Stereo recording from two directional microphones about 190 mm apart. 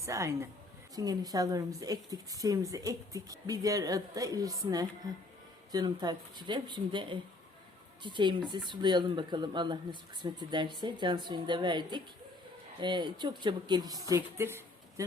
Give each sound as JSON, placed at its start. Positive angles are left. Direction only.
{"t": 0.0, "sound": "a woman's voice", "side_deg": -15}